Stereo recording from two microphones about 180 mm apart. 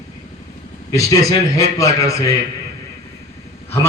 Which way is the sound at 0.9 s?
20° left (ahead or behind).